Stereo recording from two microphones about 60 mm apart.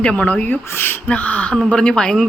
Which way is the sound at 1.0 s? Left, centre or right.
Left.